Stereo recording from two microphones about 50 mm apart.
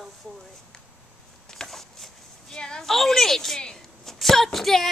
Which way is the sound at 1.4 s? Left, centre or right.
Centre.